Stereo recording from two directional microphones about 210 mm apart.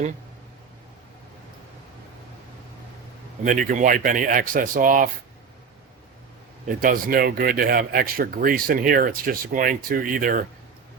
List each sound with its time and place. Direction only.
3.4 s speech: 40° right (ahead or behind)
6.7 s speech: 40° right (ahead or behind)